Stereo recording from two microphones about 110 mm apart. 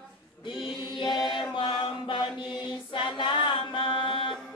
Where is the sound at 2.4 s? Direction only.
50° left (ahead or behind).